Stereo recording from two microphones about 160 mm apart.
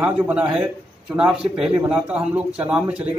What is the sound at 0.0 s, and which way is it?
A man's voice, 10° right (ahead or behind).